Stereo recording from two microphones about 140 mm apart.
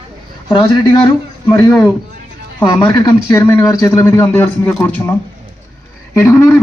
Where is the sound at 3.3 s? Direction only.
20° left (ahead or behind).